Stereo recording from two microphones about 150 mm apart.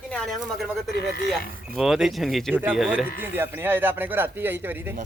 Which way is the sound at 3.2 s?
15° right (ahead or behind).